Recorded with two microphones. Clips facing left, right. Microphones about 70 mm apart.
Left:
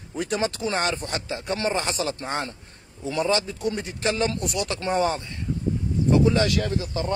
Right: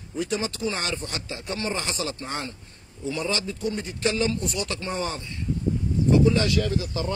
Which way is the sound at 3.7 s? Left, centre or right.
Left.